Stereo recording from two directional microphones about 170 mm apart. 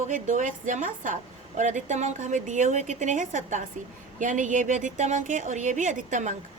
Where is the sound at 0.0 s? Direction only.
50° right (ahead or behind).